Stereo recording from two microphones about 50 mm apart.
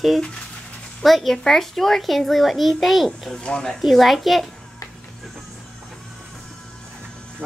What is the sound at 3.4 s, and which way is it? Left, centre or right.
Speech, centre.